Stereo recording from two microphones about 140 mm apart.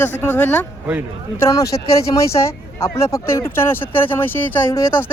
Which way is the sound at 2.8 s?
20° left (ahead or behind).